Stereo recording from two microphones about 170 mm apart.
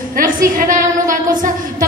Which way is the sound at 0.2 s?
50° right (ahead or behind).